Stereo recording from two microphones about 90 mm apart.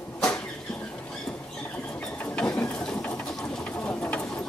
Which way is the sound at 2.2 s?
10° left (ahead or behind).